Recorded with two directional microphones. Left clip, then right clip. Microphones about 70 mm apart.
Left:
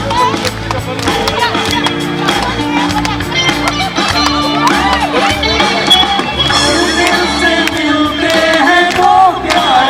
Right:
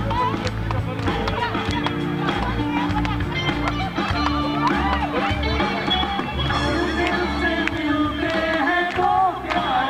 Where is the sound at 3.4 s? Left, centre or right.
Centre.